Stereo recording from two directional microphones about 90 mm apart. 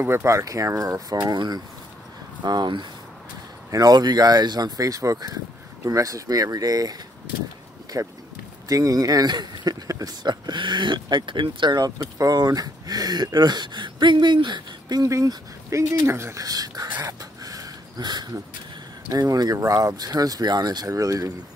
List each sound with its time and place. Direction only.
0.0 s speech: 30° right (ahead or behind); by 15.0 s 55° right (ahead or behind)
15.0 s speech: 35° right (ahead or behind)
17.0 s a sound: 40° right (ahead or behind)
19.0 s speech: 40° right (ahead or behind)